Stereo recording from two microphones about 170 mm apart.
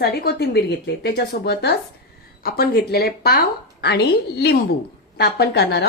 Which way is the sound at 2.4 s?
60° left (ahead or behind).